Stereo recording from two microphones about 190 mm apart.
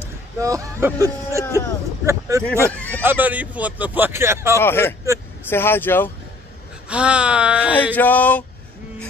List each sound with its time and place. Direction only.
0.4 s speech: 15° right (ahead or behind)
2.5 s speech: 10° left (ahead or behind)
3.0 s speech: 10° right (ahead or behind)
4.6 s a sound: 10° left (ahead or behind)
6.9 s speech: 5° right (ahead or behind)
7.7 s a sound: 10° left (ahead or behind)